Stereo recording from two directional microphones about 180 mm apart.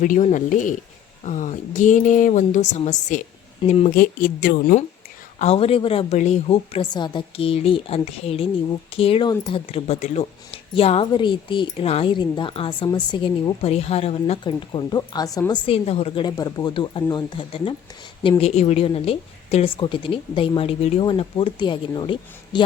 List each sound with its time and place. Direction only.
0.0 s a woman's voice: 45° left (ahead or behind)
3.9 s a woman's voice: 55° left (ahead or behind)
5.4 s a woman's voice: 35° left (ahead or behind)